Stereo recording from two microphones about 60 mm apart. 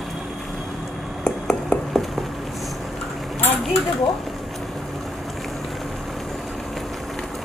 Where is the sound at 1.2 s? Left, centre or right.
Centre.